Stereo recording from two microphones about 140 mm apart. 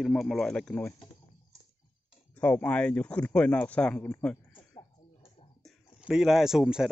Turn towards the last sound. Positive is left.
turn(degrees=-5)  # may be behind; listen again after turning